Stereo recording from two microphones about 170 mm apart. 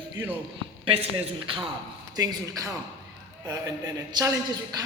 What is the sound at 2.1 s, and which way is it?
Speech, 20° right (ahead or behind).